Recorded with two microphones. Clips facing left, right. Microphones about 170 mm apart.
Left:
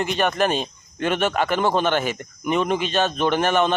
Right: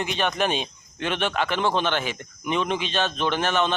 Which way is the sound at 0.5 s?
45° left (ahead or behind).